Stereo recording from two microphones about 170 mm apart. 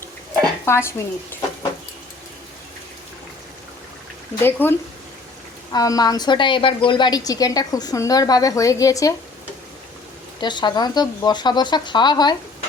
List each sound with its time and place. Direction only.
0.6 s speech: 15° left (ahead or behind)
4.4 s a woman's voice: 10° left (ahead or behind)
10.4 s a woman's voice: 25° left (ahead or behind)